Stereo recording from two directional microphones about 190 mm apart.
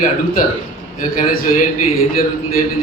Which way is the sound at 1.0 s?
45° left (ahead or behind).